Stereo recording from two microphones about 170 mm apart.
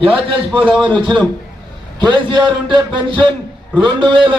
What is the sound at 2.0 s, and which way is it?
A man's voice, 25° right (ahead or behind).